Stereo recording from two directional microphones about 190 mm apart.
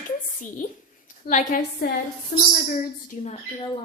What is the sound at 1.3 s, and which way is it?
A woman's voice, 45° left (ahead or behind).